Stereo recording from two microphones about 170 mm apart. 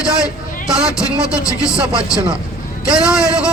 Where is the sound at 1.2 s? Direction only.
20° left (ahead or behind).